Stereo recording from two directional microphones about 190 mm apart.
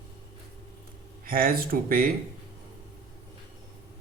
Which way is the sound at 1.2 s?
50° right (ahead or behind).